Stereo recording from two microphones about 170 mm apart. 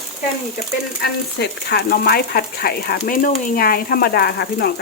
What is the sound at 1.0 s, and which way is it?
Speech, 75° left (ahead or behind).